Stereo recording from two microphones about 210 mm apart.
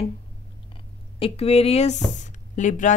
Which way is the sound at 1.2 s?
30° left (ahead or behind).